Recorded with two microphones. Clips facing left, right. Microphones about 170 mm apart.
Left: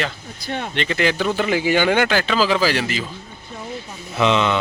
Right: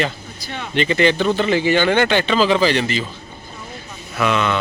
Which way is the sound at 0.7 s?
Centre (ahead or behind).